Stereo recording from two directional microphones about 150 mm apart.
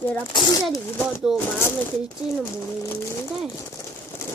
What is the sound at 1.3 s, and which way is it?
Speech, 5° right (ahead or behind).